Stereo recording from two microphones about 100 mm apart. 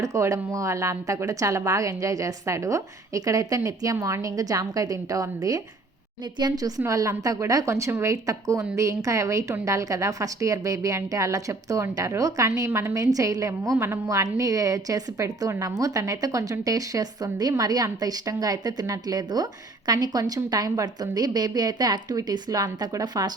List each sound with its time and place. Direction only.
0.0 s a woman's voice: 30° right (ahead or behind)